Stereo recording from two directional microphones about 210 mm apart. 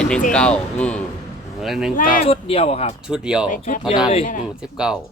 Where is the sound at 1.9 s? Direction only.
40° left (ahead or behind).